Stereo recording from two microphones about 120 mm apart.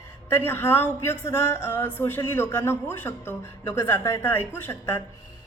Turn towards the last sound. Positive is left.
turn(degrees=15)  # may be behind; listen again after turning